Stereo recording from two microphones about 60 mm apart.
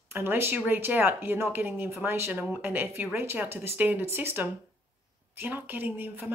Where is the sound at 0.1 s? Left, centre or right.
Right.